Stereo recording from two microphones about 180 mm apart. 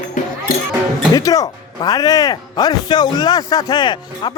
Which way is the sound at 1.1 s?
20° left (ahead or behind).